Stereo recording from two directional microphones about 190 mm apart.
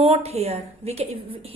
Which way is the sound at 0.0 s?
30° right (ahead or behind).